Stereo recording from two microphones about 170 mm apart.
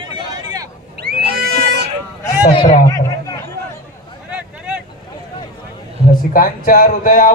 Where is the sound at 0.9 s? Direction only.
70° right (ahead or behind).